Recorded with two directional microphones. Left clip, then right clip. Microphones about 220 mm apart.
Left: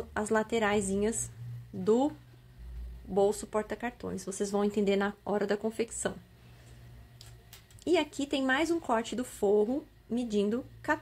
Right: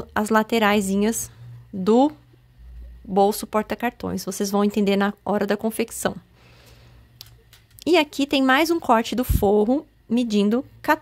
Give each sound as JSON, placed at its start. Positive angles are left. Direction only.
{"t": 0.1, "sound": "a woman's voice", "side_deg": -50}
{"t": 3.2, "sound": "a woman's voice", "side_deg": -50}
{"t": 7.2, "sound": "a sound", "side_deg": -50}
{"t": 7.8, "sound": "a woman's voice", "side_deg": -50}